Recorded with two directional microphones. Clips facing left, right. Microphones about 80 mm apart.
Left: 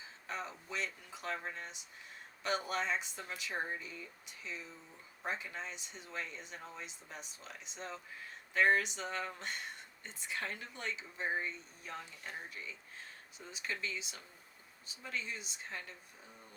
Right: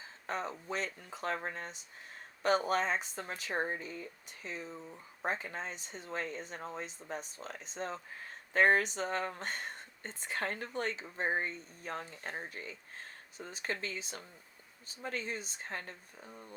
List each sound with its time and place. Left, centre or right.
0.3 s speech: right